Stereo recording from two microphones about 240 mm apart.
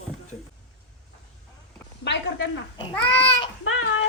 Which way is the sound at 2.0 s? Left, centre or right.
Left.